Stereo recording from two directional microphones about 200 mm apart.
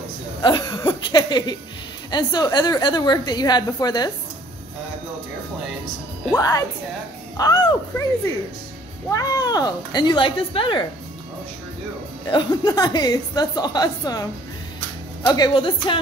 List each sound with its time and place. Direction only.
0.4 s a woman's voice: 20° left (ahead or behind)
6.3 s speech: 20° left (ahead or behind)
9.1 s a woman's voice: 15° left (ahead or behind)
12.3 s a woman's voice: 25° left (ahead or behind)
15.2 s a woman's voice: 20° left (ahead or behind)